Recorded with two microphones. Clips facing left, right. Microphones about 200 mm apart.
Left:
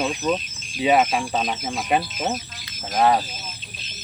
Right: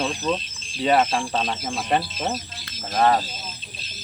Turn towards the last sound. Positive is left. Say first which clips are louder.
# left 1 dB
turn(degrees=5)  # may be behind; listen again after turning